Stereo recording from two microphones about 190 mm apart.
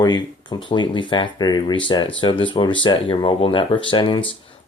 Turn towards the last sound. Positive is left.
turn(degrees=25)  # may be behind; listen again after turning